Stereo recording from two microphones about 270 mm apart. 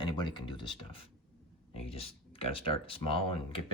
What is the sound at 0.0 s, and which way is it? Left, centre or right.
Speech, centre.